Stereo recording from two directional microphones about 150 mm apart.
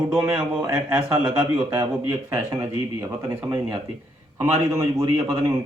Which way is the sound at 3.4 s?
10° right (ahead or behind).